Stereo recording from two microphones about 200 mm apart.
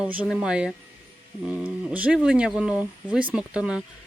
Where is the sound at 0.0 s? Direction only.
5° right (ahead or behind).